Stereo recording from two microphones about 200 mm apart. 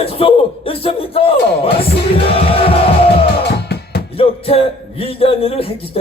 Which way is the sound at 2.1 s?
30° left (ahead or behind).